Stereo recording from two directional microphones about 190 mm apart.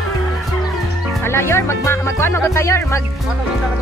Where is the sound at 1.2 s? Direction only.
15° left (ahead or behind).